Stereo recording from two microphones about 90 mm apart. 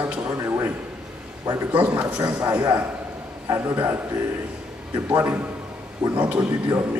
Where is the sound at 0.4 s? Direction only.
25° right (ahead or behind).